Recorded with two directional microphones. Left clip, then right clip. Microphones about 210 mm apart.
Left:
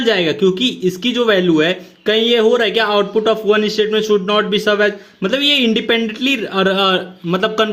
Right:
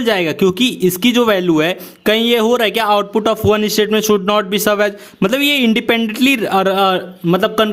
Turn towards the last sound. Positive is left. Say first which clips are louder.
# right 2 dB
turn(degrees=-25)  # may be behind; listen again after turning